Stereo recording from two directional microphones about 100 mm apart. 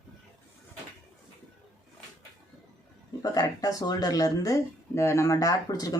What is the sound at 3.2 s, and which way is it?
Speech, 40° left (ahead or behind).